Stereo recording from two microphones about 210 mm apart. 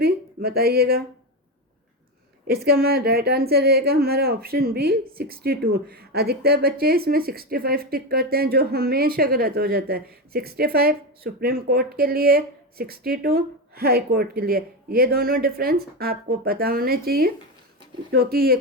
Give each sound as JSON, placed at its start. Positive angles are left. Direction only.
{"t": 0.0, "sound": "speech", "side_deg": -50}
{"t": 2.5, "sound": "speech", "side_deg": -50}